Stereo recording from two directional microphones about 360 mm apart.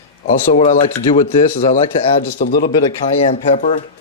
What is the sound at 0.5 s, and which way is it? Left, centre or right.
Speech, centre.